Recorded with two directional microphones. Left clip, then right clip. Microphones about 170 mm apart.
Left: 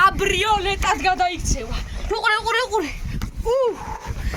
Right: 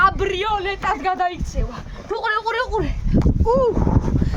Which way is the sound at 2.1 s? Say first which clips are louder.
Left 1 dB; 60° right (ahead or behind).